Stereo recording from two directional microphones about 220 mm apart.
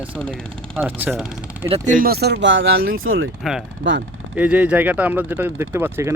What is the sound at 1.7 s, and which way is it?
Speech, 35° right (ahead or behind).